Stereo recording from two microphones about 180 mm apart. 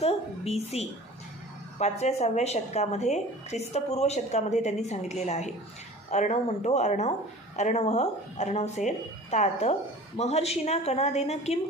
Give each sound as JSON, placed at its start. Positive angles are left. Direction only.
{"t": 0.0, "sound": "speech", "side_deg": 35}